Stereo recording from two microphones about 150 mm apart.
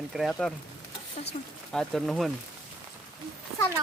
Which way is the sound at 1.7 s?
5° left (ahead or behind).